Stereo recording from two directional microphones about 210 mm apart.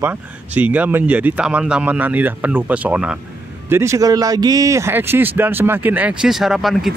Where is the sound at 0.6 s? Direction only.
5° right (ahead or behind).